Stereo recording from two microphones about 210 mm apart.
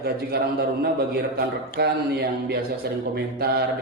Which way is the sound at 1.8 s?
50° right (ahead or behind).